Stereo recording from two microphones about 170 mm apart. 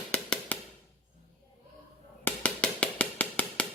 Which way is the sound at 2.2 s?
5° left (ahead or behind).